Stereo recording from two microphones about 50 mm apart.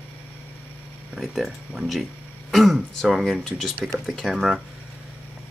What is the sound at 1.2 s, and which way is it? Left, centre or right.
Speech, centre.